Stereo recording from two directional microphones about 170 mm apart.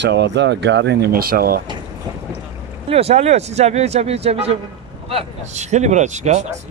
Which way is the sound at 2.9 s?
35° right (ahead or behind).